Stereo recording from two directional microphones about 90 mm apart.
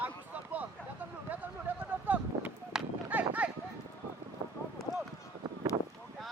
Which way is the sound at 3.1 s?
15° right (ahead or behind).